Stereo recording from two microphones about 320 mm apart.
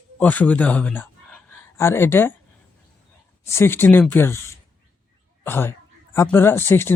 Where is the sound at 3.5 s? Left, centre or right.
Centre.